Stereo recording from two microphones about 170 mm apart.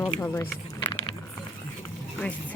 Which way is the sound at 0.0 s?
15° left (ahead or behind).